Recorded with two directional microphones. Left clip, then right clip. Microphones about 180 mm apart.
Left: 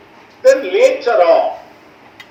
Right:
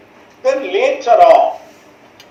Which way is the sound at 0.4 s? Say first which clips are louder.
Left 4 dB; 25° right (ahead or behind).